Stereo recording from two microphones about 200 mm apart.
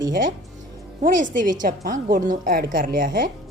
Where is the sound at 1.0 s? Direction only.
40° right (ahead or behind).